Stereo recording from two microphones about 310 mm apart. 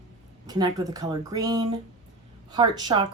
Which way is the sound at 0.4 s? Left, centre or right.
Centre.